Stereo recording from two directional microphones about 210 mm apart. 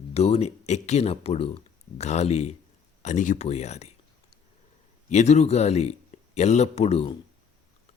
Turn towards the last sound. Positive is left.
turn(degrees=30)  # may be behind; listen again after turning